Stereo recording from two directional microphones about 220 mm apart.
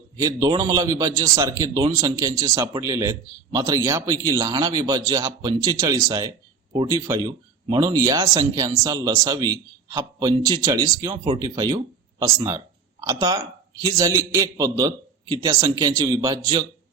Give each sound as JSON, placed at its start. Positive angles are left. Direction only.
{"t": 0.2, "sound": "a man's voice", "side_deg": -15}